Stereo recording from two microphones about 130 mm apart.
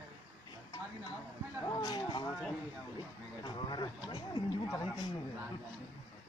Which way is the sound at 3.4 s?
35° left (ahead or behind).